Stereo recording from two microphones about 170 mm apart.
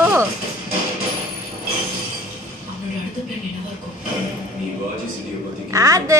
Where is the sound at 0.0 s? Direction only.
15° right (ahead or behind).